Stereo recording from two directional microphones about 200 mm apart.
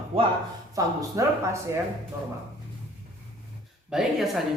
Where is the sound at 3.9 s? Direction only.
Centre (ahead or behind).